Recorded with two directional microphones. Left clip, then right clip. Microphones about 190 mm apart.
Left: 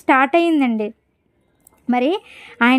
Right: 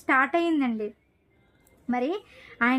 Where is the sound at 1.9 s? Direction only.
40° left (ahead or behind).